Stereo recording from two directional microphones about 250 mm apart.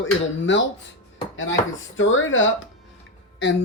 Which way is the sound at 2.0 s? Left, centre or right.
Left.